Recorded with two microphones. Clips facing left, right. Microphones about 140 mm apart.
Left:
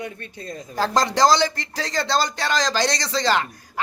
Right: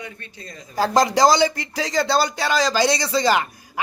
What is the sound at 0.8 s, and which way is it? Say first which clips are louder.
Speech: right 2 dB; 10° right (ahead or behind).